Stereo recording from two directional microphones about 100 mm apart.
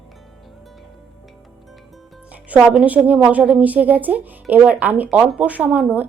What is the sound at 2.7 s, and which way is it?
Speech, 10° right (ahead or behind).